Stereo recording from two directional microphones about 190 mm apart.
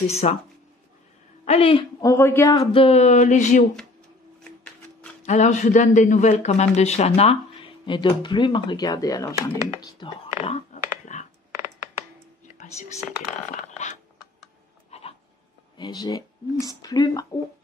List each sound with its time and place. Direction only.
0.1 s a man's voice: 35° left (ahead or behind)
1.4 s speech: 30° left (ahead or behind)
2.8 s a man's voice: 35° left (ahead or behind)
5.2 s a man's voice: 35° left (ahead or behind); by 9.3 s 20° left (ahead or behind)
9.8 s whispering: 20° left (ahead or behind); by 11.2 s 40° left (ahead or behind)
13.7 s a sound: 35° left (ahead or behind)
15.8 s speech: 20° left (ahead or behind)